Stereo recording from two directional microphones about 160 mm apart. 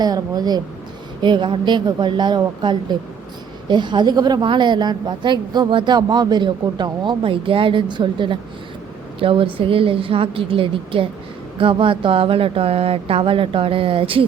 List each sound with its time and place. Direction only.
0.0 s a woman's voice: 25° right (ahead or behind)